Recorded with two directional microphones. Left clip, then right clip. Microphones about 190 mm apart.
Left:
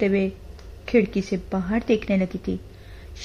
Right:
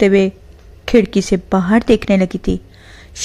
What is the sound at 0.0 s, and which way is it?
Speech, 30° right (ahead or behind).